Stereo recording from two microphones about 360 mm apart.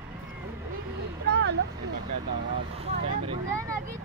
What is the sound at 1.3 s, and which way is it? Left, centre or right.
Vehicle, right.